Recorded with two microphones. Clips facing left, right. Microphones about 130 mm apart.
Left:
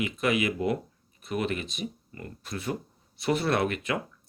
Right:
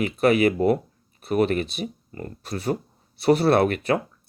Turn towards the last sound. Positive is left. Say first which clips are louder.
# right 8 dB
turn(degrees=-35)  # may be behind; listen again after turning